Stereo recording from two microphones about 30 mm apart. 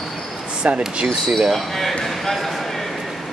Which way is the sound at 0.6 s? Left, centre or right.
Right.